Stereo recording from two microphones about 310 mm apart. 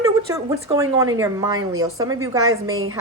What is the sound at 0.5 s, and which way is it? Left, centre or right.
A woman's voice, centre.